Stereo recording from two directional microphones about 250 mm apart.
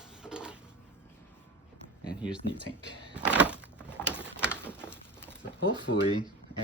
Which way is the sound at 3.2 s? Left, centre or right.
Centre.